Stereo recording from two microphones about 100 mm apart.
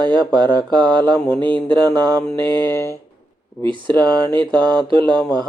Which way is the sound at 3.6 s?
50° right (ahead or behind).